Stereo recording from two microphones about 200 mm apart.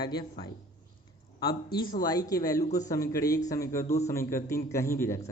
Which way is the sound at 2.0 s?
20° left (ahead or behind).